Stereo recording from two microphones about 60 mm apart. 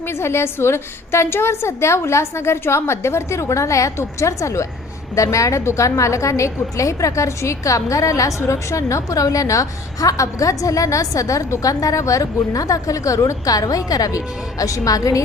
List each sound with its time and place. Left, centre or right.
0.1 s a woman's voice: left